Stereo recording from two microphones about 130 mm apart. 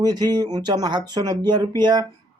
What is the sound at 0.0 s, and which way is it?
Speech, 30° right (ahead or behind).